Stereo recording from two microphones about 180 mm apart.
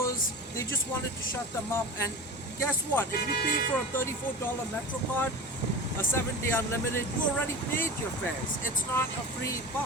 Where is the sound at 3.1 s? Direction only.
55° left (ahead or behind).